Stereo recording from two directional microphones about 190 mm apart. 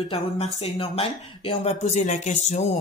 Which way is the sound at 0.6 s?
35° left (ahead or behind).